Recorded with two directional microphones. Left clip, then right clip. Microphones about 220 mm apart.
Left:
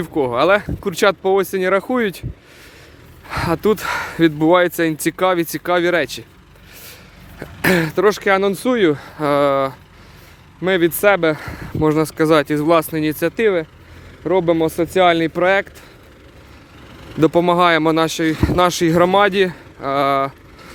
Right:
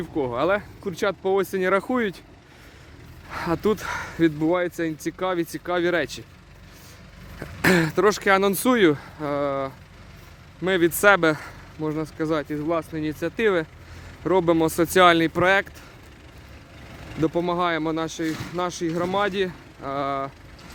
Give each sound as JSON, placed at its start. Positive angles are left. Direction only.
{"t": 0.0, "sound": "speech", "side_deg": 25}
{"t": 3.2, "sound": "speech", "side_deg": 25}
{"t": 7.3, "sound": "speech", "side_deg": 10}
{"t": 9.1, "sound": "speech", "side_deg": 40}
{"t": 10.6, "sound": "speech", "side_deg": 20}
{"t": 11.0, "sound": "speech", "side_deg": 10}
{"t": 11.8, "sound": "speech", "side_deg": 40}
{"t": 13.3, "sound": "speech", "side_deg": 10}
{"t": 17.2, "sound": "speech", "side_deg": 40}